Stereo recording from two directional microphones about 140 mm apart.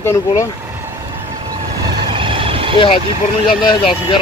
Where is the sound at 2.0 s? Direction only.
40° right (ahead or behind).